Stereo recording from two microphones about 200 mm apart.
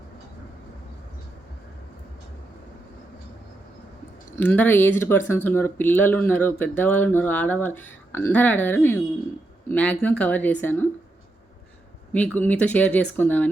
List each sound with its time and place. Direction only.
4.4 s speech: 10° left (ahead or behind)
12.1 s speech: 5° left (ahead or behind)